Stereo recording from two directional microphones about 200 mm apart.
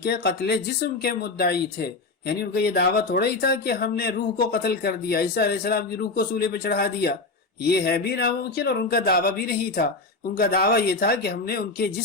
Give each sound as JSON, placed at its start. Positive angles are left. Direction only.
{"t": 0.0, "sound": "speech", "side_deg": 50}